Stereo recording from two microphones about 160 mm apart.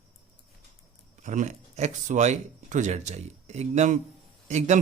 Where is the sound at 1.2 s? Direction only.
50° right (ahead or behind).